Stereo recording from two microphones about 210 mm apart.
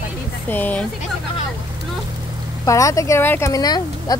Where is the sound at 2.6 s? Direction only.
15° left (ahead or behind).